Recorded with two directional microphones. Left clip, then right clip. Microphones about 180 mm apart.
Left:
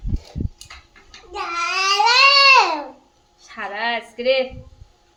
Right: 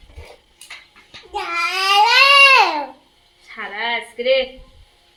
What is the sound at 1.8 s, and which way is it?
Child singing, 55° right (ahead or behind).